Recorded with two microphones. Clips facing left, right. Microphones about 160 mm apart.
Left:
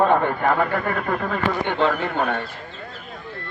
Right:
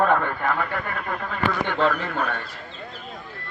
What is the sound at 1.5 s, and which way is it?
Speech, 30° left (ahead or behind).